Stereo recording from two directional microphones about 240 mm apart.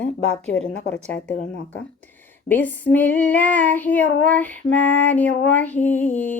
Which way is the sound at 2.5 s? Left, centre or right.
Centre.